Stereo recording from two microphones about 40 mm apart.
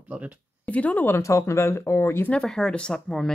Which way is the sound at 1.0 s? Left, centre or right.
Left.